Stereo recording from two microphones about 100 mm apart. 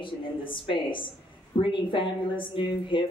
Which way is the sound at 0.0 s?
55° left (ahead or behind).